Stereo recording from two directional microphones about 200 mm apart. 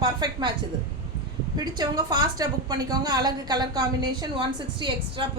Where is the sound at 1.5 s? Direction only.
20° right (ahead or behind).